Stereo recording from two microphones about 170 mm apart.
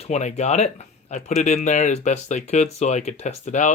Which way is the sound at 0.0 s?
40° left (ahead or behind).